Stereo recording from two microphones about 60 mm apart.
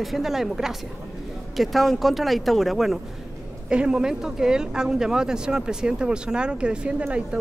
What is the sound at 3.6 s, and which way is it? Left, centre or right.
A woman's voice, centre.